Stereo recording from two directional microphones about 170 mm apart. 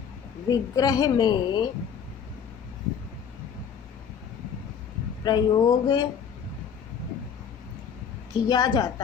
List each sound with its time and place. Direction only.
0.5 s a woman's voice: 20° left (ahead or behind)
5.2 s a woman's voice: 25° left (ahead or behind)
8.3 s a woman's voice: 25° left (ahead or behind)